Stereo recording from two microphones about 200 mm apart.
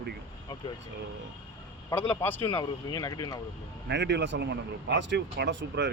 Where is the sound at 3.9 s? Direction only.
60° right (ahead or behind).